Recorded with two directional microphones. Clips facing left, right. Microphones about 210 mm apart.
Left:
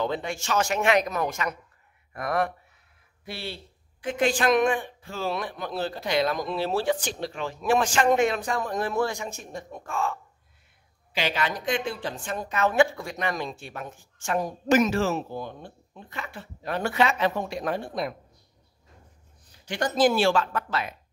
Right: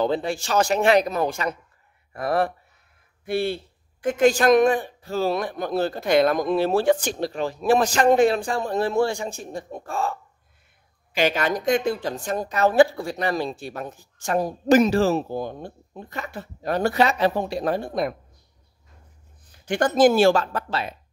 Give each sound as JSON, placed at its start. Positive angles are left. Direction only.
{"t": 0.0, "sound": "a woman's voice", "side_deg": -35}
{"t": 3.3, "sound": "a woman's voice", "side_deg": -50}
{"t": 11.1, "sound": "a woman's voice", "side_deg": -45}
{"t": 19.6, "sound": "speech", "side_deg": -50}